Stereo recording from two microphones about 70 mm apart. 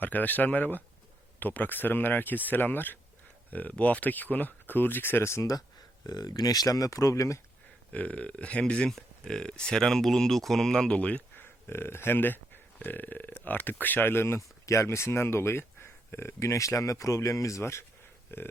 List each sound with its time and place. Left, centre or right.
0.0 s speech: left
6.1 s speech: left
7.9 s speech: centre
11.3 s speech: left
18.3 s a sound: left